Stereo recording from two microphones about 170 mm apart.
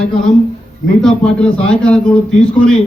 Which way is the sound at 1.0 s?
5° left (ahead or behind).